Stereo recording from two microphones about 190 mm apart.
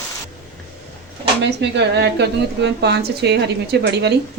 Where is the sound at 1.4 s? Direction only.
65° right (ahead or behind).